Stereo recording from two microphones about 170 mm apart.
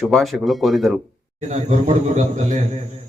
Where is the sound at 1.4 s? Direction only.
40° right (ahead or behind).